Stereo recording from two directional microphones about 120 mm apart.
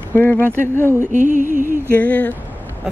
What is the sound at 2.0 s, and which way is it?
Speech, 10° left (ahead or behind).